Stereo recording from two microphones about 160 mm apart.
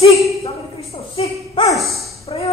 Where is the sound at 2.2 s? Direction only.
40° left (ahead or behind).